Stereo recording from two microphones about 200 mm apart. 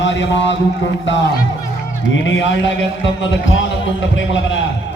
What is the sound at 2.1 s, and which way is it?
Heart sounds, 70° left (ahead or behind).